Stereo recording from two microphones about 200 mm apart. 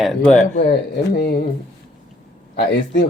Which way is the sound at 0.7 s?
50° left (ahead or behind).